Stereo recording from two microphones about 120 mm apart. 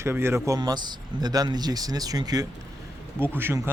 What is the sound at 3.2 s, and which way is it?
Speech, 20° right (ahead or behind).